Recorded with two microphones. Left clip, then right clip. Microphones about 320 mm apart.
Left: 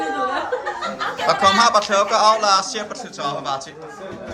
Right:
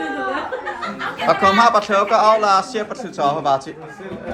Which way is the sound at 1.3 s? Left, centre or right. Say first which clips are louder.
Right 2 dB; centre.